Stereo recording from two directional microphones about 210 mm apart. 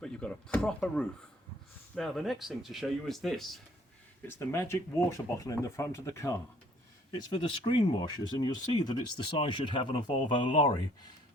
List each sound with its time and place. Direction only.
0.0 s speech: 5° left (ahead or behind)
4.3 s speech: 15° left (ahead or behind)